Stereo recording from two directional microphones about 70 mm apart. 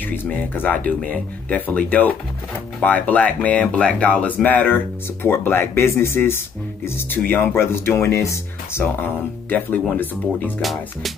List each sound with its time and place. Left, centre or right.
0.0 s speech: left
8.8 s speech: left
10.6 s music: centre